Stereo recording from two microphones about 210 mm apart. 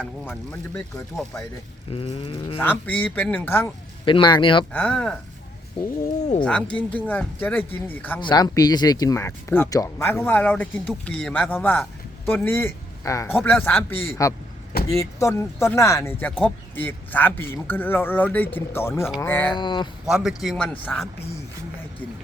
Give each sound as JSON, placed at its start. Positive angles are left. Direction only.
{"t": 0.0, "sound": "speech", "side_deg": 10}
{"t": 1.9, "sound": "livestock", "side_deg": 25}
{"t": 2.6, "sound": "speech", "side_deg": 10}
{"t": 4.0, "sound": "livestock", "side_deg": 25}
{"t": 4.7, "sound": "a man's voice", "side_deg": 5}
{"t": 6.4, "sound": "a man's voice", "side_deg": 5}
{"t": 8.2, "sound": "speech", "side_deg": 20}
{"t": 19.5, "sound": "livestock", "side_deg": 20}
{"t": 20.1, "sound": "a man's voice", "side_deg": -5}